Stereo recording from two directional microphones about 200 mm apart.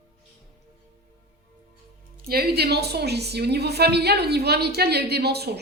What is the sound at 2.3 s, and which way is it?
A woman's voice, 50° right (ahead or behind).